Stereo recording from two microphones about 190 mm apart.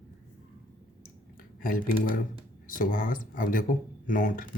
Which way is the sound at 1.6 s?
45° left (ahead or behind).